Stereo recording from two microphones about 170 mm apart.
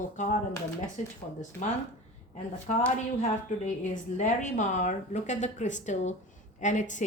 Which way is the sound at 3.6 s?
45° left (ahead or behind).